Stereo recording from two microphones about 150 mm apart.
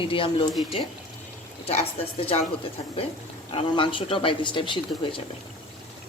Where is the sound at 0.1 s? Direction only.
35° left (ahead or behind).